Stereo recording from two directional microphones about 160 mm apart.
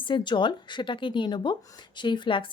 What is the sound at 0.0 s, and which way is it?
A woman's voice, 30° left (ahead or behind).